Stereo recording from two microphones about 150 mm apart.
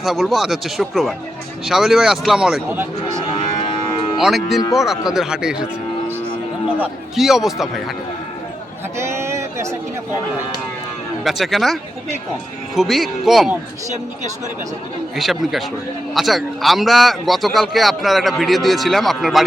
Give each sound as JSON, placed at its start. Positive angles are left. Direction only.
{"t": 0.0, "sound": "a man's voice", "side_deg": 0}
{"t": 2.6, "sound": "speech", "side_deg": -15}
{"t": 4.2, "sound": "a man's voice", "side_deg": 0}
{"t": 6.8, "sound": "a man's voice", "side_deg": 0}
{"t": 9.0, "sound": "a sound", "side_deg": -20}
{"t": 11.2, "sound": "a man's voice", "side_deg": 0}
{"t": 15.1, "sound": "a man's voice", "side_deg": 0}